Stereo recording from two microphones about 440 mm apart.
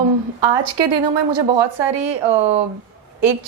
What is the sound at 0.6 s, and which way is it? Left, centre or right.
A woman's voice, right.